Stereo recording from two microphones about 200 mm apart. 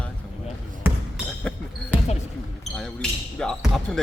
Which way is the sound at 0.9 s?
10° right (ahead or behind).